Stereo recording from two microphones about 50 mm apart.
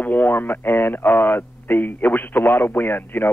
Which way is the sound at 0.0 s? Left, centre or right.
Left.